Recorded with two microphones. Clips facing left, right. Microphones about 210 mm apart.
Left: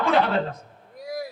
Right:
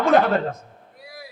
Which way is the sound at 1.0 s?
45° left (ahead or behind).